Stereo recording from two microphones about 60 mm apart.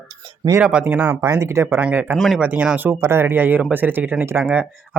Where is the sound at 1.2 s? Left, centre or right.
Right.